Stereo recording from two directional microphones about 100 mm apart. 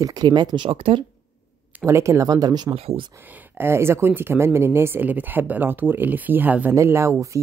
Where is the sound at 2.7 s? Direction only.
80° right.